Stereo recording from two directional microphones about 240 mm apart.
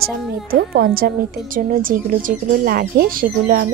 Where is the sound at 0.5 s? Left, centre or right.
Right.